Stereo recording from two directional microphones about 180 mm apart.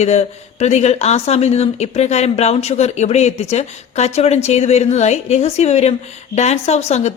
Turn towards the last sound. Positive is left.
turn(degrees=40)  # may be behind; listen again after turning